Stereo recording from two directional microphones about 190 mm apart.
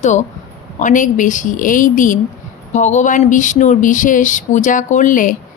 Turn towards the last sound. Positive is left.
turn(degrees=45)  # may be behind; listen again after turning